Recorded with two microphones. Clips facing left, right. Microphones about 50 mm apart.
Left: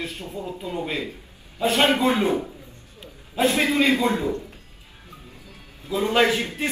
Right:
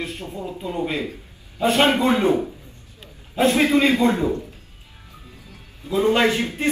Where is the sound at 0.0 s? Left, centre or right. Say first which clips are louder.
Right 2 dB; right.